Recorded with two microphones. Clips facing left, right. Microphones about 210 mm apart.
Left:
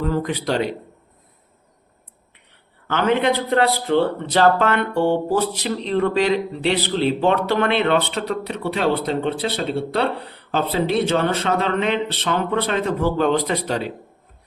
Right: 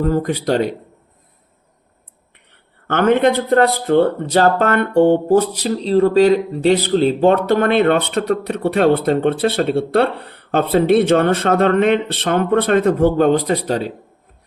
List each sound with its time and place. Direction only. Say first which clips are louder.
0.0 s speech: right 5 dB; 45° right (ahead or behind)
2.8 s speech: right 5 dB; 50° right (ahead or behind)